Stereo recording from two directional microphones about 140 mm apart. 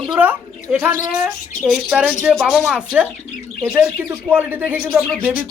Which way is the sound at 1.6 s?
5° right (ahead or behind).